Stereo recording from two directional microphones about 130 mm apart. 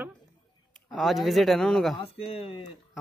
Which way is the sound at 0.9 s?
Centre (ahead or behind).